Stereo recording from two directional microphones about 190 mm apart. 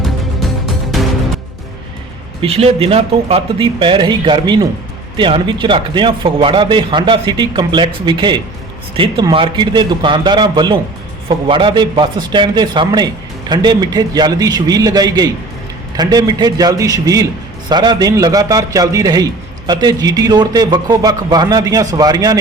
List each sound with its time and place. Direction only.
0.0 s music: centre (ahead or behind)
2.4 s a man's voice: 30° right (ahead or behind)